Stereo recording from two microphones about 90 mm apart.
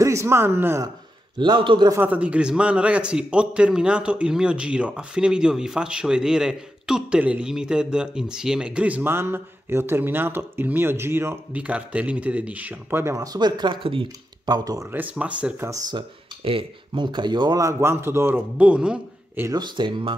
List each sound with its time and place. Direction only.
0.0 s a man's voice: 35° right (ahead or behind)
1.4 s a man's voice: 65° right (ahead or behind)
2.0 s a man's voice: 15° right (ahead or behind)
11.5 s a man's voice: 15° right (ahead or behind)
13.0 s speech: 40° right (ahead or behind); by 13.7 s 55° right (ahead or behind)
13.8 s speech: 80° right
14.5 s speech: 40° right (ahead or behind)
14.9 s a man's voice: 15° right (ahead or behind)
16.4 s a man's voice: 75° right (ahead or behind); by 17.6 s 55° right (ahead or behind)
17.6 s speech: 30° right (ahead or behind)
18.6 s a man's voice: 15° right (ahead or behind)
19.5 s a man's voice: 55° right (ahead or behind)